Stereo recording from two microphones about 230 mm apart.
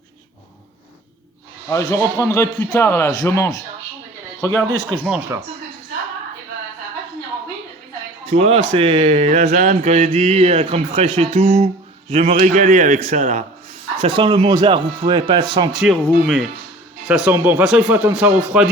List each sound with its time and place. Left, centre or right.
1.7 s a man's voice: centre
5.0 s a man's voice: centre
8.3 s a man's voice: right
15.7 s a man's voice: centre